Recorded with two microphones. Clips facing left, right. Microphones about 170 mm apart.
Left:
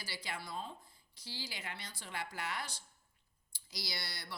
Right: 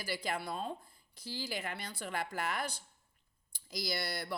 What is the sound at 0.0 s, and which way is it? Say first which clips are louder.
A woman's voice: right 8 dB; 50° right (ahead or behind).